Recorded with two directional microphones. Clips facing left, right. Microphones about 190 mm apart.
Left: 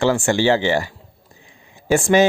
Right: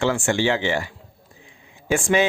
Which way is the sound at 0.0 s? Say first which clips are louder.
Left 4 dB; 35° left (ahead or behind).